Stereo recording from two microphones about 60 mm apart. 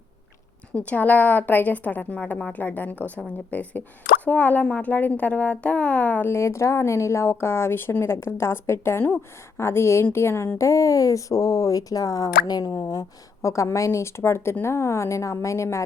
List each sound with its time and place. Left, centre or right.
0.7 s speech: left
6.2 s a woman's voice: left
10.6 s speech: left